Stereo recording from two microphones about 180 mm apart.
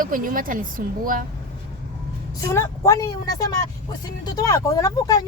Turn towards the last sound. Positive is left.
turn(degrees=20)  # may be behind; listen again after turning